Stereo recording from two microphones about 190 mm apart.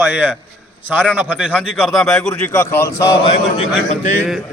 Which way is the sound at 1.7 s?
Centre (ahead or behind).